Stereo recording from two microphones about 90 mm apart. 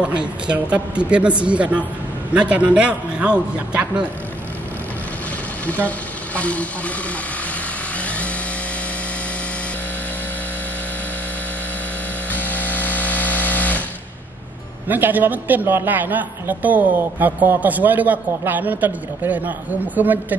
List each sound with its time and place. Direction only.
0.2 s speech: 10° right (ahead or behind)
5.9 s speech: 15° left (ahead or behind)
8.0 s chainsaw: 15° left (ahead or behind)
12.3 s a sound: 20° left (ahead or behind)
14.9 s a man's voice: 20° right (ahead or behind)